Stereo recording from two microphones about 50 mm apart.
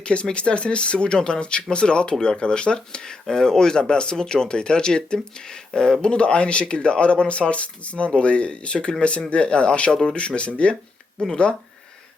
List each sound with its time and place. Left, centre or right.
0.0 s speech: left